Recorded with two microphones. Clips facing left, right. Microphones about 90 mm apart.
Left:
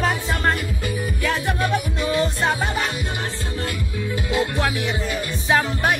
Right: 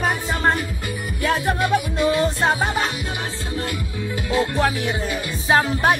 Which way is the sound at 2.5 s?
25° right (ahead or behind).